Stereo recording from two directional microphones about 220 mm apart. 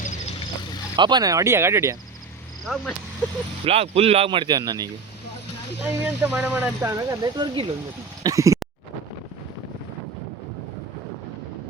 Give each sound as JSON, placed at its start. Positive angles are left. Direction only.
{"t": 0.9, "sound": "speech", "side_deg": -20}
{"t": 2.7, "sound": "speech", "side_deg": 0}
{"t": 3.7, "sound": "speech", "side_deg": -25}